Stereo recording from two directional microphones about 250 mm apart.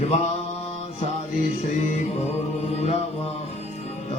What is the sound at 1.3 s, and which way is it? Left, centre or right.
Music, left.